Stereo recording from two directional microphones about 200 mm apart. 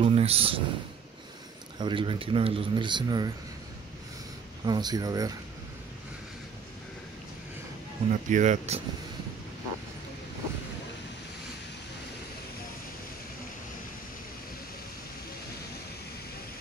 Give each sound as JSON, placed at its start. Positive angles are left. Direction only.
{"t": 0.0, "sound": "speech", "side_deg": -30}
{"t": 1.8, "sound": "speech", "side_deg": -25}
{"t": 4.6, "sound": "speech", "side_deg": -20}
{"t": 8.1, "sound": "speech", "side_deg": -35}